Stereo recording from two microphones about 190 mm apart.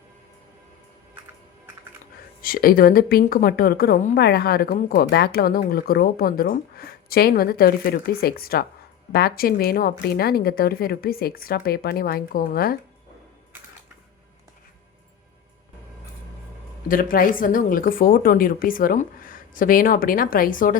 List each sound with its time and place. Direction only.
2.4 s a woman's voice: 50° left (ahead or behind)
16.9 s a woman's voice: 50° left (ahead or behind)